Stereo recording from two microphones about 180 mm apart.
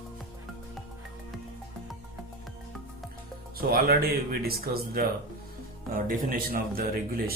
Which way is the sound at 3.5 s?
55° right (ahead or behind).